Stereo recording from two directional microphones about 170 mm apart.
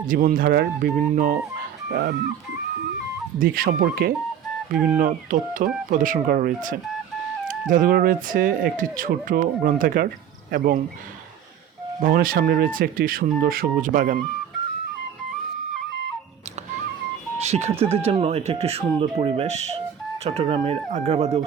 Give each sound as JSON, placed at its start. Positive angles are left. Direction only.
{"t": 0.1, "sound": "speech", "side_deg": -50}
{"t": 1.9, "sound": "speech", "side_deg": -65}
{"t": 3.3, "sound": "speech", "side_deg": -60}
{"t": 11.9, "sound": "speech", "side_deg": -55}
{"t": 17.3, "sound": "speech", "side_deg": -40}